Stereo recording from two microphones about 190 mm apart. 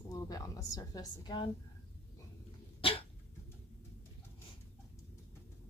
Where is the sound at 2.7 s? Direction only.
30° left (ahead or behind).